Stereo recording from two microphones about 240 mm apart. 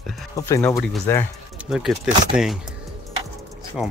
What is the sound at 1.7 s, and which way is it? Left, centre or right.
Speech, centre.